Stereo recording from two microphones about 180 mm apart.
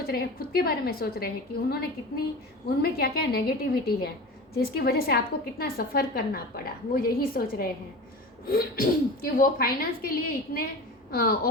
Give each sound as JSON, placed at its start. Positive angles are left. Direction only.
{"t": 0.1, "sound": "a woman's voice", "side_deg": 60}
{"t": 2.6, "sound": "a woman's voice", "side_deg": 60}